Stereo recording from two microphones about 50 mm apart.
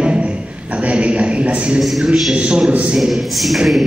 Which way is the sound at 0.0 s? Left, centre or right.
Right.